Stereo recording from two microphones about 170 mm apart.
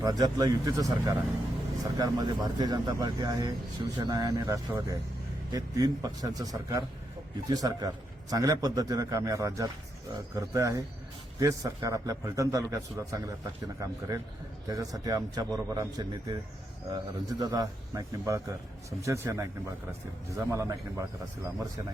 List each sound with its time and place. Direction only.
0.0 s a man's voice: 20° right (ahead or behind)